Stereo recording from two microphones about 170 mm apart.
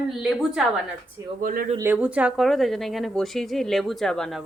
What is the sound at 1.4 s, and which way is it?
Speech, 55° right (ahead or behind).